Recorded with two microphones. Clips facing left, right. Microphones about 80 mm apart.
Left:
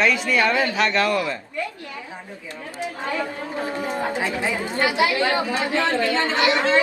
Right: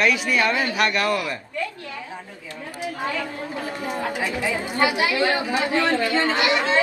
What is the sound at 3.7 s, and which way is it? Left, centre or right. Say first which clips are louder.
Speech: left 1 dB; left.